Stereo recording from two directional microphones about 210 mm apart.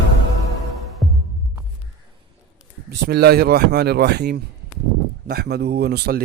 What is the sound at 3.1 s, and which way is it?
Speech, 50° right (ahead or behind).